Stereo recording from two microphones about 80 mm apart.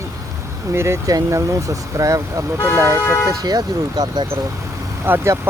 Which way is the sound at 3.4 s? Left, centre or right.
Right.